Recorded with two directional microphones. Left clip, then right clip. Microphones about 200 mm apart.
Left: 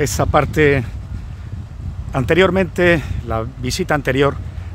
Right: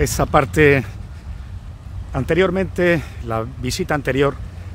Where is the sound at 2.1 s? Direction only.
15° left (ahead or behind).